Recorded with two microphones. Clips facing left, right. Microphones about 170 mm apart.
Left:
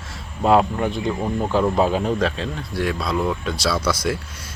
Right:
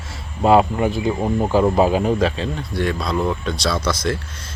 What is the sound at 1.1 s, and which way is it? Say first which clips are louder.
Speech: right 3 dB; 20° right (ahead or behind).